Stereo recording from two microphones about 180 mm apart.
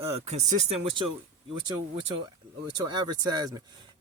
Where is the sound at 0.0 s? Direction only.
35° right (ahead or behind).